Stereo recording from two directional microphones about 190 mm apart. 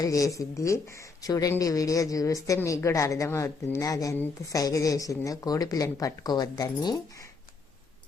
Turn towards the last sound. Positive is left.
turn(degrees=20)  # may be behind; listen again after turning